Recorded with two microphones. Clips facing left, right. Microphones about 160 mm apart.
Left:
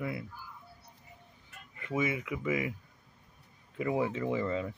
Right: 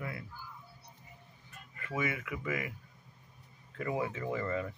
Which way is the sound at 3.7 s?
15° left (ahead or behind).